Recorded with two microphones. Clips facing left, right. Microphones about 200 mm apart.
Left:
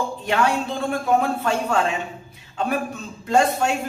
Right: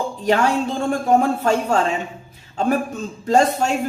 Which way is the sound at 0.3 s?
40° right (ahead or behind).